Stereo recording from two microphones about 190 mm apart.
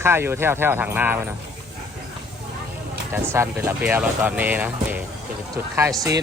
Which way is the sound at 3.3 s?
10° right (ahead or behind).